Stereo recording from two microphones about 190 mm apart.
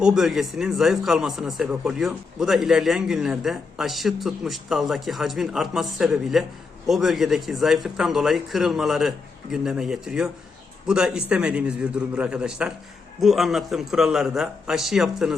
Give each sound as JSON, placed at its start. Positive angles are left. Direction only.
{"t": 0.0, "sound": "a man's voice", "side_deg": 0}